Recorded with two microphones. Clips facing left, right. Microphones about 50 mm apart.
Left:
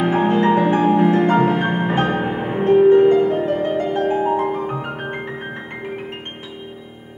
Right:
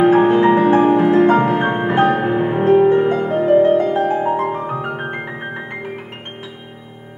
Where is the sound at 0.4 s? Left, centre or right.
Centre.